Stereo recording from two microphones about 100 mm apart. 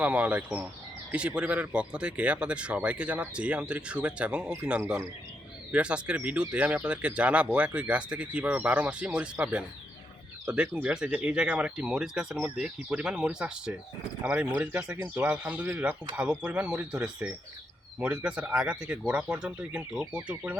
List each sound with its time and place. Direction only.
0.0 s speech: 15° right (ahead or behind)